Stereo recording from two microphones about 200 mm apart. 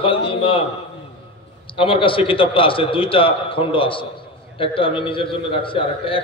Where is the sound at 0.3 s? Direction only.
25° left (ahead or behind).